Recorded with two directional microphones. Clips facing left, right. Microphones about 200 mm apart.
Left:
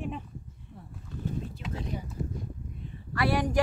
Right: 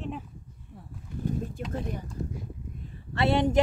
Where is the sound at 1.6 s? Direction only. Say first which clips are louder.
Right 3 dB; 50° right (ahead or behind).